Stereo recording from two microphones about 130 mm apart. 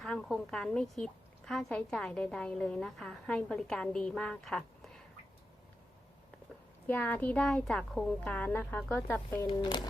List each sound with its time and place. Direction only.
0.0 s a woman's voice: 5° left (ahead or behind)
6.8 s speech: 10° left (ahead or behind)
9.5 s speech: 35° left (ahead or behind)